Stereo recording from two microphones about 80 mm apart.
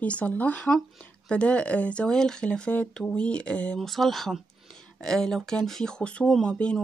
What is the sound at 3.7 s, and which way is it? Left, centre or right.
A woman's voice, centre.